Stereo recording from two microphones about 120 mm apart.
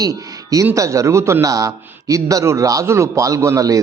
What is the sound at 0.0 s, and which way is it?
Speech, 30° right (ahead or behind).